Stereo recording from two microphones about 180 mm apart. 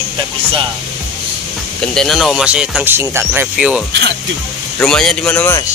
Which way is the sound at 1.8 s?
Centre (ahead or behind).